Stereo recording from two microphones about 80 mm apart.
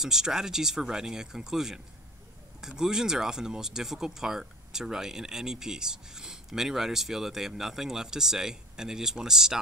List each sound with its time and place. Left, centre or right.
0.0 s speech: centre